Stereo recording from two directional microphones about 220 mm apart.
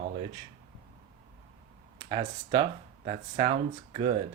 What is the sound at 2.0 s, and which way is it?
Speech, 20° right (ahead or behind).